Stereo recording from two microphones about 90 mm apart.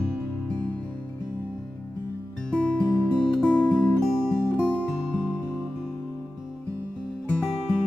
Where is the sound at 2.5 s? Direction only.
10° left (ahead or behind).